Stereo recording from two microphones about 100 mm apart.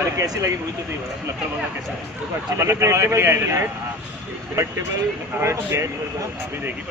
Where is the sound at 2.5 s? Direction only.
30° right (ahead or behind).